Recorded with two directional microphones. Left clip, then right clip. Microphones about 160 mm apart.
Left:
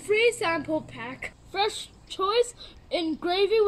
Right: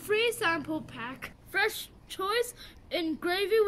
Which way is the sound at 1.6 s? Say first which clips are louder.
Left 2 dB; 35° right (ahead or behind).